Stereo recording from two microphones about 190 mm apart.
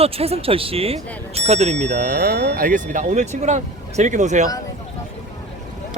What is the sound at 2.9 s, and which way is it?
Speech, 40° right (ahead or behind).